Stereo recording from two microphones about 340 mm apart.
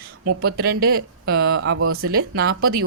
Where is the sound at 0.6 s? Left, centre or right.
Right.